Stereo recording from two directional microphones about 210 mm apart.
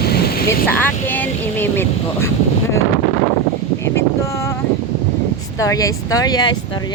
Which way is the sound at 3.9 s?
15° left (ahead or behind).